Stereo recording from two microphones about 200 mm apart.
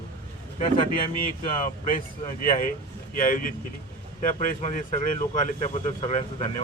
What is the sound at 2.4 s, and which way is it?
Speech, 45° left (ahead or behind).